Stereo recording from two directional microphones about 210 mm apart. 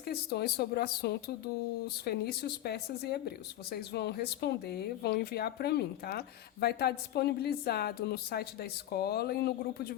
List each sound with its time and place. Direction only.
0.0 s speech: 50° left (ahead or behind)